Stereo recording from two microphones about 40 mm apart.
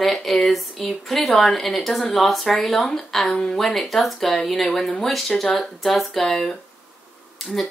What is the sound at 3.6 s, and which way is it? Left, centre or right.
Speech, centre.